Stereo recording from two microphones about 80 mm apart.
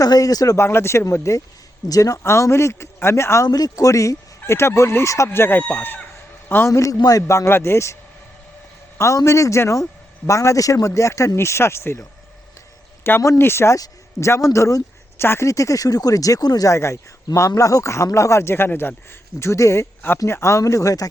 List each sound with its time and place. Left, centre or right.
0.0 s speech: left
0.5 s speech: left
2.2 s speech: left
3.4 s speech: left
9.0 s speech: left
13.1 s speech: left
13.7 s speech: left
16.7 s speech: left